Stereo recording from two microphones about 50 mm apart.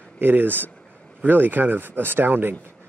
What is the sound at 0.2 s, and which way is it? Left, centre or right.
Speech, right.